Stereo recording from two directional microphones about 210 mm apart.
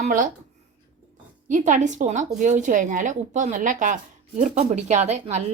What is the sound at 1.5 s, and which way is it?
Speech, 35° right (ahead or behind).